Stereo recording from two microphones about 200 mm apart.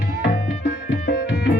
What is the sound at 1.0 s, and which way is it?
Music, 55° left (ahead or behind).